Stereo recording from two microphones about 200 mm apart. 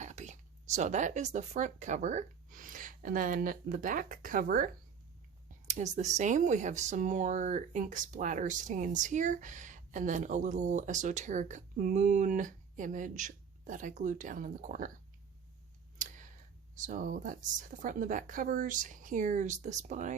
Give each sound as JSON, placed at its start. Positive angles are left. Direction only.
{"t": 0.0, "sound": "speech", "side_deg": -35}
{"t": 16.0, "sound": "tick", "side_deg": -40}
{"t": 16.8, "sound": "speech", "side_deg": -40}